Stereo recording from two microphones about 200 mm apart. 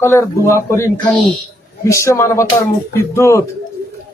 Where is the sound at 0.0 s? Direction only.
15° left (ahead or behind).